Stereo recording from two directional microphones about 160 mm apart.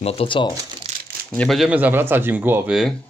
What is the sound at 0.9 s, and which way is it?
Crumpling, 45° right (ahead or behind).